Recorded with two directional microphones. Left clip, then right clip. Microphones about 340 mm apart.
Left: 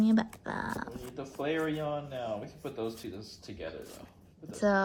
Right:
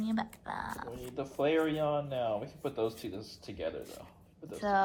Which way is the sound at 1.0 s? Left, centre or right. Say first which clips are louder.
Right 4 dB; right.